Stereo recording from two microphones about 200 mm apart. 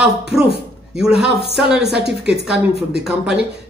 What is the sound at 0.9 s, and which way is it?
Speech, 5° right (ahead or behind).